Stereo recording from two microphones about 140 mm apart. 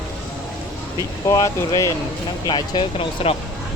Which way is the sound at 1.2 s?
20° left (ahead or behind).